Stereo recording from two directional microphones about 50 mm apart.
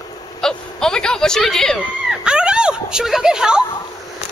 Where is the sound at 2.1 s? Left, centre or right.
Centre.